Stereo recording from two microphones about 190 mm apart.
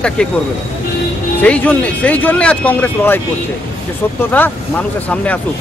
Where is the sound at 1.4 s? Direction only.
5° left (ahead or behind).